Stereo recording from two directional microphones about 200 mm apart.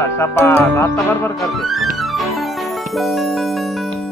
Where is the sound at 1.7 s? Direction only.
Centre (ahead or behind).